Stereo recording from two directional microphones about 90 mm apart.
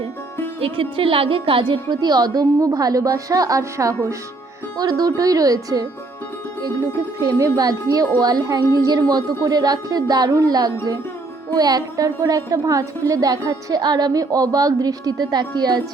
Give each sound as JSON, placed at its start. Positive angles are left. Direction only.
{"t": 0.6, "sound": "a woman's voice", "side_deg": -85}
{"t": 7.3, "sound": "a woman's voice", "side_deg": -40}